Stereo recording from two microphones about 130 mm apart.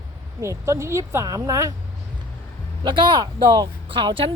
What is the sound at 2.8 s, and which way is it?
Speech, 35° right (ahead or behind).